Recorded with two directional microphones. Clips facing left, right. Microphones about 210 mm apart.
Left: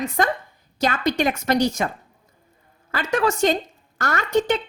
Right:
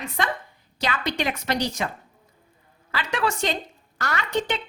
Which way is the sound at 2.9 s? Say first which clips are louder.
Left 5 dB; 45° left (ahead or behind).